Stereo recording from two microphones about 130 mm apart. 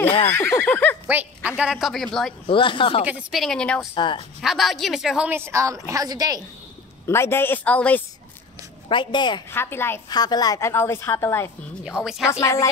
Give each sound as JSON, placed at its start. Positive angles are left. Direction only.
{"t": 0.3, "sound": "speech", "side_deg": 15}
{"t": 1.0, "sound": "a woman's voice", "side_deg": -10}
{"t": 2.4, "sound": "speech", "side_deg": 40}
{"t": 3.1, "sound": "a woman's voice", "side_deg": -5}
{"t": 3.9, "sound": "speech", "side_deg": 40}
{"t": 4.4, "sound": "a woman's voice", "side_deg": 0}
{"t": 5.3, "sound": "a woman's voice", "side_deg": -20}
{"t": 7.1, "sound": "speech", "side_deg": 20}
{"t": 8.8, "sound": "speech", "side_deg": 35}
{"t": 9.5, "sound": "speech", "side_deg": 20}
{"t": 10.0, "sound": "a woman's voice", "side_deg": 30}
{"t": 11.8, "sound": "a woman's voice", "side_deg": -5}
{"t": 12.3, "sound": "a woman's voice", "side_deg": 25}